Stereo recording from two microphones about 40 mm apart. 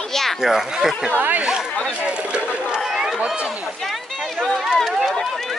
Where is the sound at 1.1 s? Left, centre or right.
Right.